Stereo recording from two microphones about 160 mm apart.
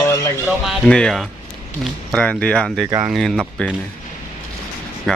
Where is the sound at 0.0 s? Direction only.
15° left (ahead or behind).